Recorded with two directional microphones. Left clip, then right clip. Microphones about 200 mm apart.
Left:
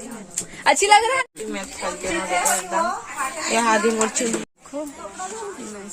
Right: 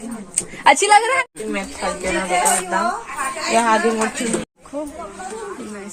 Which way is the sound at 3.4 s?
50° left (ahead or behind).